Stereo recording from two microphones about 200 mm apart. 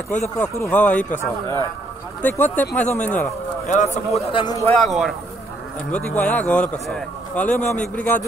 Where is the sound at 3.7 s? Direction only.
35° left (ahead or behind).